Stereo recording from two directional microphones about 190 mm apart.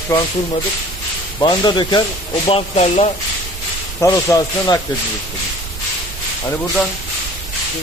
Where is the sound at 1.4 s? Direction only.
20° left (ahead or behind).